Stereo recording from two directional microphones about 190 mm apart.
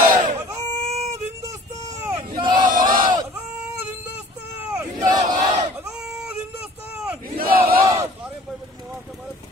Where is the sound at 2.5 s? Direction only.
45° right (ahead or behind).